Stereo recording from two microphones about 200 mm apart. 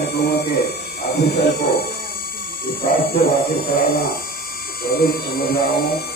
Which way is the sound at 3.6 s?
50° left (ahead or behind).